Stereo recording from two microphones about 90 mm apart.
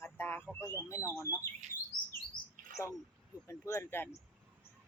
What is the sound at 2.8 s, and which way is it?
Speech, 30° left (ahead or behind).